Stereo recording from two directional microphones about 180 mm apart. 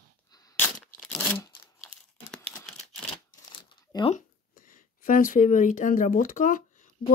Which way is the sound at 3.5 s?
25° left (ahead or behind).